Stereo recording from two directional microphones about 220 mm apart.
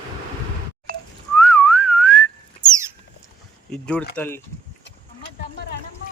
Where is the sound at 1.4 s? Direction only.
5° left (ahead or behind).